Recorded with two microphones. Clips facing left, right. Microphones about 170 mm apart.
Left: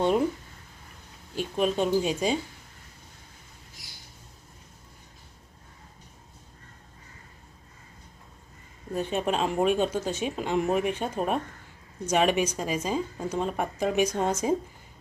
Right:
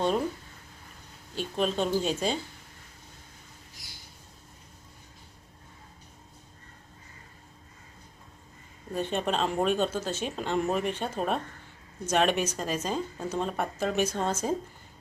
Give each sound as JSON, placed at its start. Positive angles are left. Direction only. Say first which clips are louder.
{"t": 1.4, "sound": "speech", "louder": "left 2 dB", "side_deg": 10}
{"t": 8.9, "sound": "speech", "louder": "left 2 dB", "side_deg": 5}